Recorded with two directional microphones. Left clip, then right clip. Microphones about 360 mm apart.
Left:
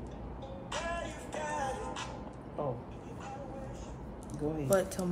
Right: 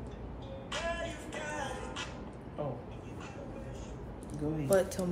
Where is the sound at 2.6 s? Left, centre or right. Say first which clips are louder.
Left 2 dB; left.